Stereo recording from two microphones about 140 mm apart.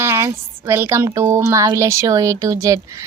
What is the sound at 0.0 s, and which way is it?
Speech, 20° right (ahead or behind).